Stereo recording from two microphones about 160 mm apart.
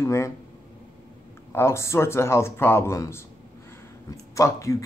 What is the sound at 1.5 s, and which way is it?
Speech, 15° left (ahead or behind).